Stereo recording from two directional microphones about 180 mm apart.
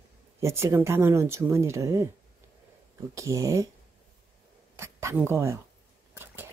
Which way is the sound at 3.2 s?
15° right (ahead or behind).